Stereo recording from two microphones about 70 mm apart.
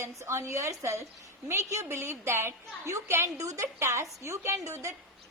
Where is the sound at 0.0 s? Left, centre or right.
Right.